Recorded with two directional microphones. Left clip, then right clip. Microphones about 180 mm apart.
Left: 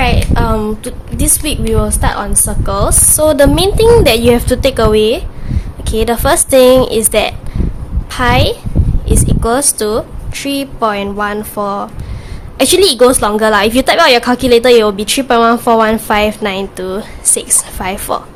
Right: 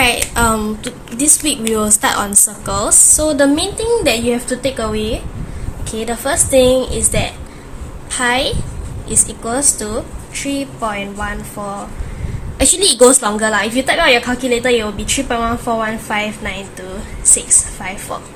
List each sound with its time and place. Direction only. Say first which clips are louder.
0.0 s a sound: right 1 dB; 10° left (ahead or behind)
1.1 s a woman's voice: right 1 dB; 25° left (ahead or behind)
1.7 s a woman's voice: even; centre (ahead or behind)
2.6 s a woman's voice: left 8 dB; 15° left (ahead or behind)
3.2 s a woman's voice: left 5 dB; 30° left (ahead or behind)
9.2 s a woman's voice: left 7 dB; 40° left (ahead or behind)
12.5 s a woman's voice: left 4 dB; 30° left (ahead or behind); by 18.2 s 50° left (ahead or behind)